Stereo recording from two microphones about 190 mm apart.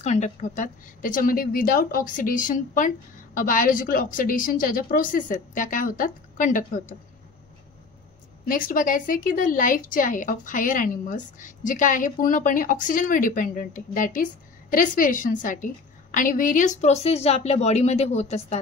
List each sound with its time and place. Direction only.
0.0 s a woman's voice: 35° left (ahead or behind)
8.5 s a woman's voice: 45° left (ahead or behind)